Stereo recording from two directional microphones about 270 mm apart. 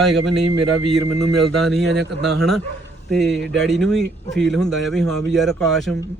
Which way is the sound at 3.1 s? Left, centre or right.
Centre.